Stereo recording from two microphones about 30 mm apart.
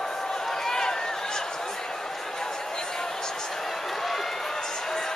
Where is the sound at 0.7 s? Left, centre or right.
Centre.